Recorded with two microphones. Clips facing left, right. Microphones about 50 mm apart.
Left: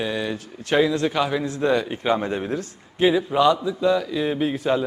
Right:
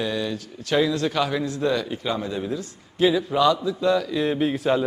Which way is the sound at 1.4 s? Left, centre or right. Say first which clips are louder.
Left 2 dB; left.